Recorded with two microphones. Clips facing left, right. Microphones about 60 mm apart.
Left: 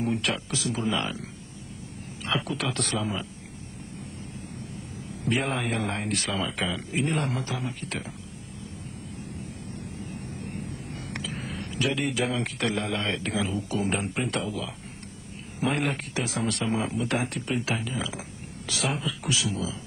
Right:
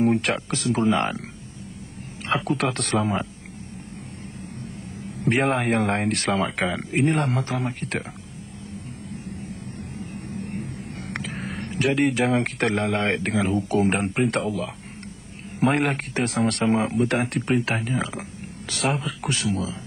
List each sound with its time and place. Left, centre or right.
0.0 s speech: right
2.2 s speech: right
5.0 s speech: right
9.9 s vehicle: right
15.6 s speech: right